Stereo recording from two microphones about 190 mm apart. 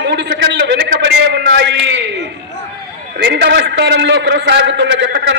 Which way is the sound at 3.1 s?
60° right (ahead or behind).